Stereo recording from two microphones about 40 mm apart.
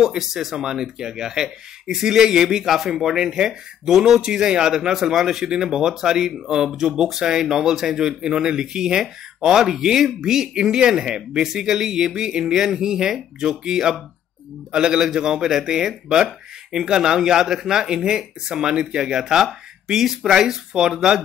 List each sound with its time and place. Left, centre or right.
0.2 s speech: centre
9.0 s speech: centre